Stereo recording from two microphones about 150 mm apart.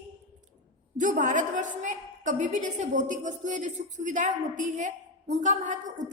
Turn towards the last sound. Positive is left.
turn(degrees=-55)  # may be behind; listen again after turning